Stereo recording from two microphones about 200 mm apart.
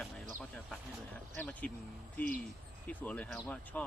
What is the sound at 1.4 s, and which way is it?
Speech, 5° left (ahead or behind).